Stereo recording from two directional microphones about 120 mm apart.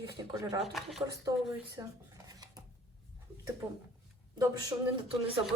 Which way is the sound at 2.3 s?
30° right (ahead or behind).